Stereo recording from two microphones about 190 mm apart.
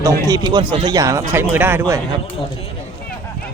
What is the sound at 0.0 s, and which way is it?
Speech, 20° right (ahead or behind).